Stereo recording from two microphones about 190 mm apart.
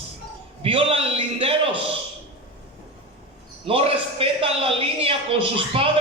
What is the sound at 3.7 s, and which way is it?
A man's voice, 30° right (ahead or behind).